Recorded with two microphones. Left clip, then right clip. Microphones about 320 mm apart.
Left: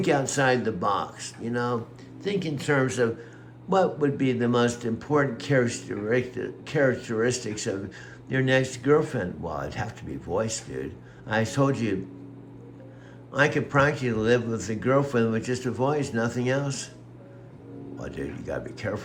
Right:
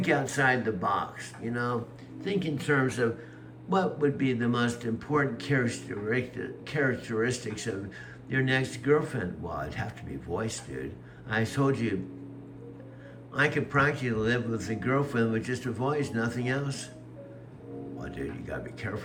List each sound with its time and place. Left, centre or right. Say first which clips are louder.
0.0 s a man's voice: left 3 dB; centre
13.3 s a man's voice: left 4 dB; centre
17.9 s a man's voice: left 4 dB; centre